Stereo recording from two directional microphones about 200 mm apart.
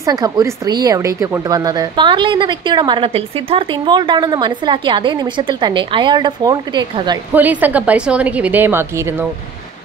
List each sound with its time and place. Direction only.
0.0 s speech: 20° right (ahead or behind)
7.3 s a woman's voice: 10° right (ahead or behind)